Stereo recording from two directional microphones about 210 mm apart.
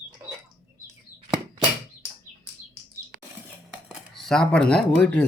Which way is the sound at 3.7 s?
Centre (ahead or behind).